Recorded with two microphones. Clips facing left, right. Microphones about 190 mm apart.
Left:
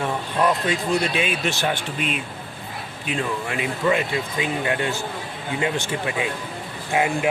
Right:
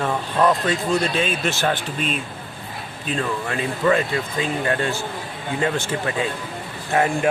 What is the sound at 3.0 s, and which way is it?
Speech, 10° left (ahead or behind).